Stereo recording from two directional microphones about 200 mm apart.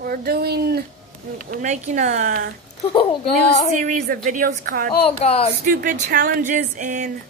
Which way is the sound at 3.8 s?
40° right (ahead or behind).